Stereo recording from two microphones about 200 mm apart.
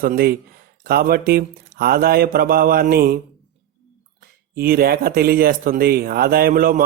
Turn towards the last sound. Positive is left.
turn(degrees=-45)  # may be behind; listen again after turning